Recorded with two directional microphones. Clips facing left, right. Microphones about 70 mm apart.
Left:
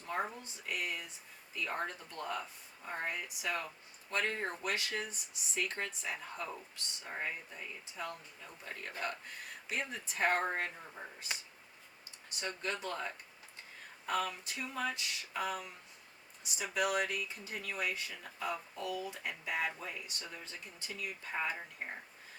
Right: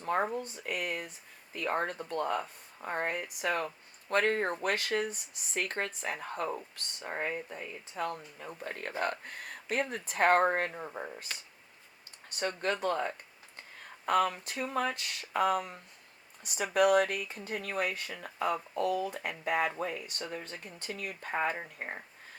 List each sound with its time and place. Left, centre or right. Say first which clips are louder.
0.0 s speech: right 7 dB; right
12.4 s speech: right 7 dB; right